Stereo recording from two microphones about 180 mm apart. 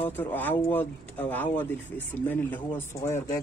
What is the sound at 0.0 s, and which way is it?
Speech, 10° left (ahead or behind).